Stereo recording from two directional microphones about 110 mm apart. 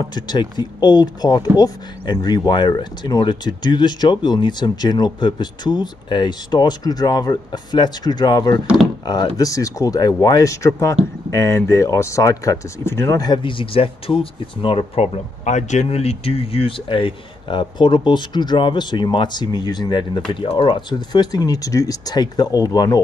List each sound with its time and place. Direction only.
0.0 s speech: 40° left (ahead or behind)